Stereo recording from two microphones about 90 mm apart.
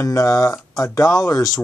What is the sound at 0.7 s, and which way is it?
Speech, 35° left (ahead or behind).